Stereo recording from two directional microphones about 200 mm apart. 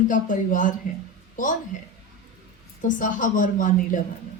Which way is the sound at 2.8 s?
40° left (ahead or behind).